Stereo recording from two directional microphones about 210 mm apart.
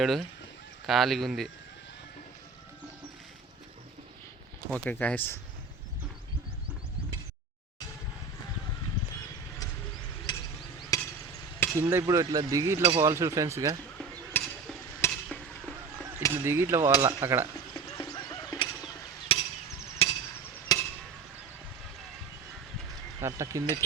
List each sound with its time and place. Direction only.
0.0 s speech: centre (ahead or behind)
4.7 s speech: 5° left (ahead or behind)
10.3 s chop: 20° left (ahead or behind)
11.8 s speech: 10° right (ahead or behind)
14.0 s a sound: centre (ahead or behind)
15.0 s stir: 5° left (ahead or behind)
16.3 s speech: 10° right (ahead or behind)
17.7 s fowl: 20° left (ahead or behind)
19.3 s hammer: 25° left (ahead or behind)
20.0 s chop: 25° left (ahead or behind)
20.7 s a sound: 20° left (ahead or behind)
23.2 s speech: 15° right (ahead or behind)